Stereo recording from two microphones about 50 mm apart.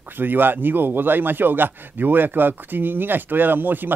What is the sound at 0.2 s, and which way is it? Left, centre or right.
A man's voice, right.